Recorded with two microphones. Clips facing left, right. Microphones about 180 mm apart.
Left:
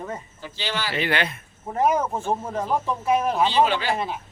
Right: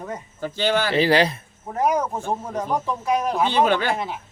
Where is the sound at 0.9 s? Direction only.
35° right (ahead or behind).